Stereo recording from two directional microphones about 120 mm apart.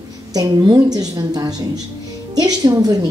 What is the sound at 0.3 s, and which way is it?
A woman's voice, 30° right (ahead or behind).